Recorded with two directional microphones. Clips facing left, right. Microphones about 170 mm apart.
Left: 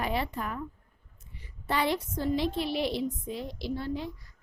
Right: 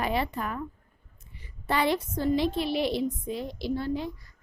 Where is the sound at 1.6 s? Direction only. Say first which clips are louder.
Right 3 dB; 65° right (ahead or behind).